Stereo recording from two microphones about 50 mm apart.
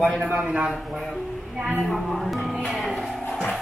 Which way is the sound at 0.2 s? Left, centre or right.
Right.